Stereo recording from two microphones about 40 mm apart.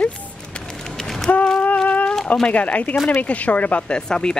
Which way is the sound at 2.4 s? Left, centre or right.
Left.